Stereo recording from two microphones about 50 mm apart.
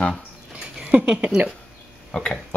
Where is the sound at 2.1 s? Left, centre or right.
Centre.